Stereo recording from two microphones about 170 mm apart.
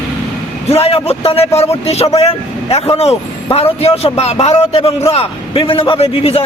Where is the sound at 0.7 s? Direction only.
35° left (ahead or behind).